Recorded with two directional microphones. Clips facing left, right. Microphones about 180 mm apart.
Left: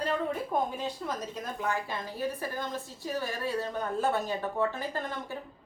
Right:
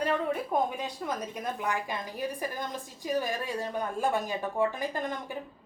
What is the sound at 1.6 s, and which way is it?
A woman's voice, 15° right (ahead or behind).